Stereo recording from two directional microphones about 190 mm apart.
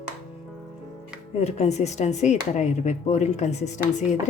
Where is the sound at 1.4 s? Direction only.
35° left (ahead or behind).